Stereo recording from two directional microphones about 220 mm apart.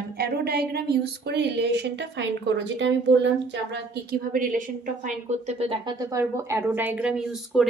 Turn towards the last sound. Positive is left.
turn(degrees=-5)  # may be behind; listen again after turning